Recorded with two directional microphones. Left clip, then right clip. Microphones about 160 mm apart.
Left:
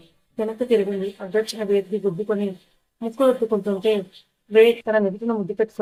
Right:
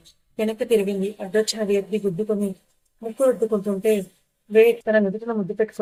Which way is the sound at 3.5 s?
5° right (ahead or behind).